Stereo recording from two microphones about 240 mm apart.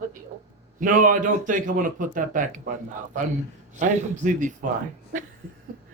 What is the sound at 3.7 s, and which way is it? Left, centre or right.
Speech, right.